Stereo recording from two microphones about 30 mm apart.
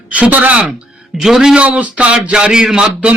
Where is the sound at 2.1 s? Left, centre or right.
Right.